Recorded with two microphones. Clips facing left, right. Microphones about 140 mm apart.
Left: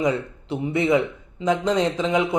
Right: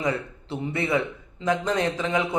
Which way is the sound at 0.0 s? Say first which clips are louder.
Left 4 dB; 15° left (ahead or behind).